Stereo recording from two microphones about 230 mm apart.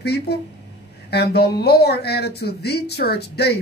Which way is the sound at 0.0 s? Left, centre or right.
Left.